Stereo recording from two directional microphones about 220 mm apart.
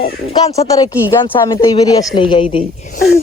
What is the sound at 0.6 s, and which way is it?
Speech, 15° left (ahead or behind).